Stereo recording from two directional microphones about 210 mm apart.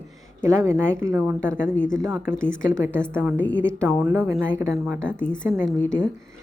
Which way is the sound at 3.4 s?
5° left (ahead or behind).